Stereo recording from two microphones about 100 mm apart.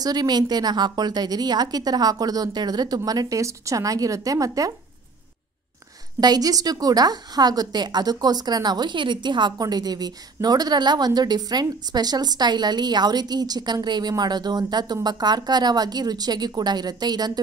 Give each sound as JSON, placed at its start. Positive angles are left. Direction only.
{"t": 0.0, "sound": "a woman's voice", "side_deg": -40}
{"t": 6.2, "sound": "a woman's voice", "side_deg": -40}